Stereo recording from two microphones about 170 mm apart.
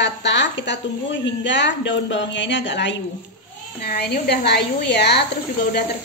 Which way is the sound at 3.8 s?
70° left (ahead or behind).